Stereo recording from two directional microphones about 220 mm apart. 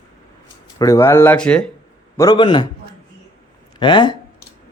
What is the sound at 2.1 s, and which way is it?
Speech, 15° left (ahead or behind).